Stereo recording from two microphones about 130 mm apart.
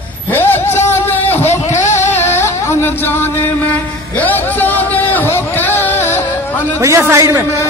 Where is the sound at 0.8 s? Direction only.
15° left (ahead or behind).